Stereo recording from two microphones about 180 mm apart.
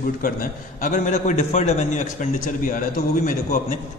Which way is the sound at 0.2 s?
50° left (ahead or behind).